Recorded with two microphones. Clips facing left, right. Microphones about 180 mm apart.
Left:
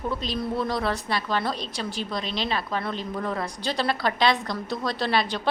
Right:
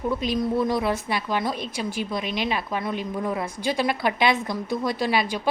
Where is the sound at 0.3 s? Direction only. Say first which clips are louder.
Right 4 dB; 15° right (ahead or behind).